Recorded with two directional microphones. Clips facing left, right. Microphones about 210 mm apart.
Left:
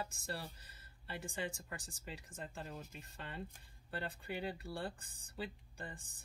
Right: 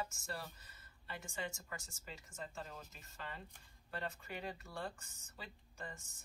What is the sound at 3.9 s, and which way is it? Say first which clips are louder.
Speech: left 2 dB; 30° left (ahead or behind).